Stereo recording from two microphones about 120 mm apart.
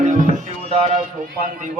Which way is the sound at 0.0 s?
90° right.